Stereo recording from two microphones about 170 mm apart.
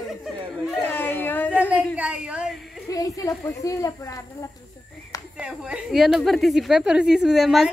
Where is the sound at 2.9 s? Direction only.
20° left (ahead or behind).